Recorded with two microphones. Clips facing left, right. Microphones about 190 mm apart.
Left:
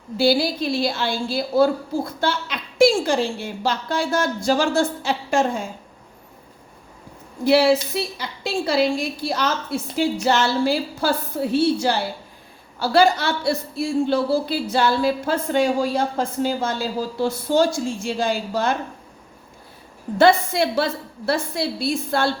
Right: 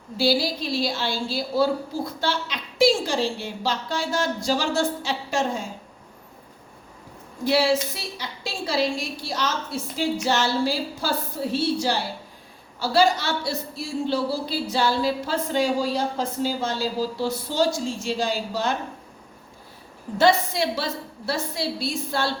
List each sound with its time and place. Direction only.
0.2 s a woman's voice: 55° left (ahead or behind)
7.4 s speech: 60° left (ahead or behind)
20.1 s speech: 55° left (ahead or behind)